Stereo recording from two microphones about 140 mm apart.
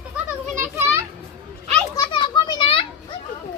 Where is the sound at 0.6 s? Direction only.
15° right (ahead or behind).